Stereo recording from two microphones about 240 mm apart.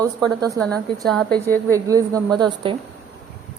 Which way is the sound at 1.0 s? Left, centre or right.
Centre.